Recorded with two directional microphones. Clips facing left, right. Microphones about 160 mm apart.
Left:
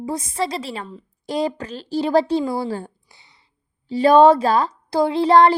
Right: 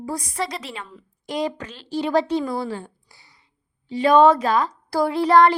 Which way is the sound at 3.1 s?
20° left (ahead or behind).